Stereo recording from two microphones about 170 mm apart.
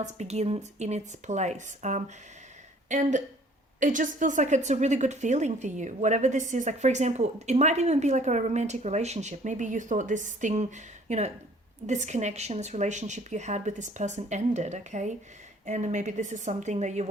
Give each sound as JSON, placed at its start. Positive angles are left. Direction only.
{"t": 0.0, "sound": "speech", "side_deg": -40}